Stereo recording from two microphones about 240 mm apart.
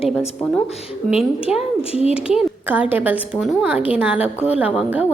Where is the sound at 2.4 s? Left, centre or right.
Centre.